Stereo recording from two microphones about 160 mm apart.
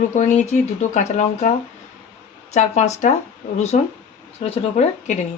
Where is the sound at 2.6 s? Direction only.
45° left (ahead or behind).